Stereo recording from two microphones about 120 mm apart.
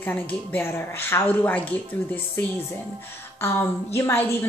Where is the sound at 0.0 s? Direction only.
15° left (ahead or behind).